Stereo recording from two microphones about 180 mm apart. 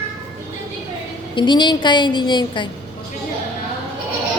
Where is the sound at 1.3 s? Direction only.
25° left (ahead or behind).